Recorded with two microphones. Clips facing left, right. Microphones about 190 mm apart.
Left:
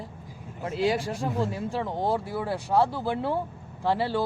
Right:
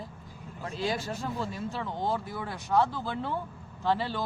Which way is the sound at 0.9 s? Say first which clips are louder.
Left 5 dB; 10° left (ahead or behind).